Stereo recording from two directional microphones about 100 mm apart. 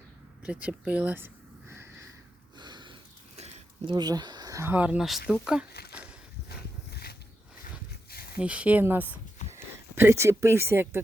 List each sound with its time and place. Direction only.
0.4 s a sound: 10° right (ahead or behind); by 2.1 s 30° right (ahead or behind)
2.6 s sniff: 50° right (ahead or behind)
3.8 s speech: 45° right (ahead or behind)
4.6 s speech: 15° right (ahead or behind)
8.4 s speech: 10° right (ahead or behind)